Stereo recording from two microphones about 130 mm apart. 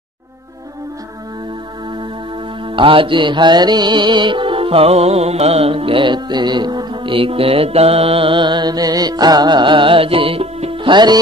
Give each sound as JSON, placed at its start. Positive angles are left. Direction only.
{"t": 2.6, "sound": "music", "side_deg": -40}